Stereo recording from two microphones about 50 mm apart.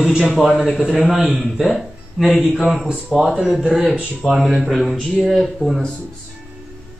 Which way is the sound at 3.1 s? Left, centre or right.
Centre.